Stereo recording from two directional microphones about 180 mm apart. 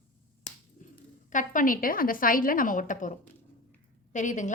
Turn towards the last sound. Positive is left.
turn(degrees=45)  # may be behind; listen again after turning